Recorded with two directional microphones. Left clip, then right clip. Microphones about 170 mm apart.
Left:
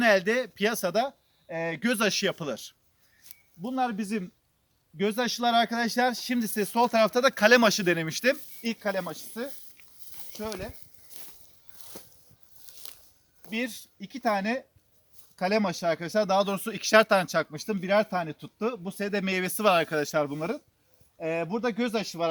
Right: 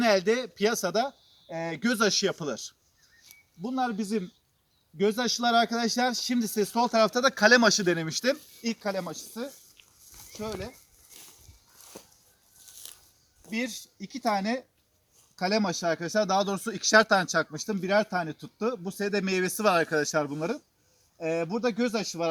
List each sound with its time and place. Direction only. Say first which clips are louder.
0.0 s speech: left 1 dB; 10° left (ahead or behind)
3.2 s speech: even; 5° left (ahead or behind)
11.1 s walk: even; centre (ahead or behind)
13.4 s speech: even; 5° left (ahead or behind)